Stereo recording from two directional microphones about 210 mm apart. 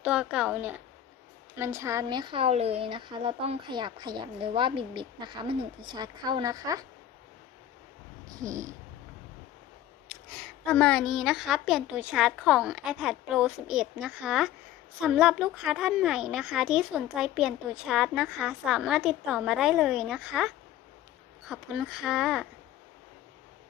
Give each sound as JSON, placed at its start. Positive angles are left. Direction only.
{"t": 0.0, "sound": "a woman's voice", "side_deg": -5}
{"t": 8.4, "sound": "speech", "side_deg": -15}
{"t": 10.1, "sound": "a woman's voice", "side_deg": 5}